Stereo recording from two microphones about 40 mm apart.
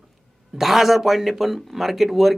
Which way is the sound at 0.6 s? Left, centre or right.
Centre.